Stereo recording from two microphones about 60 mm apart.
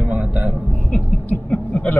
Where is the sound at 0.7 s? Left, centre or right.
Centre.